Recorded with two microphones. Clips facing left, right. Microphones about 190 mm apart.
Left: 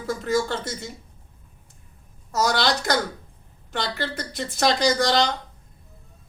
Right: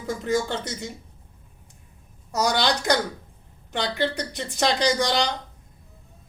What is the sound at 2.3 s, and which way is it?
Speech, 15° right (ahead or behind).